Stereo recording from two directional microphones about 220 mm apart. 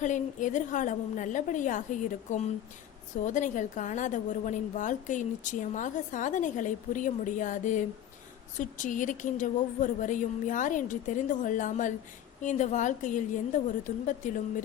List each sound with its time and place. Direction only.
0.0 s a woman's voice: 35° left (ahead or behind)
3.2 s a woman's voice: 35° left (ahead or behind)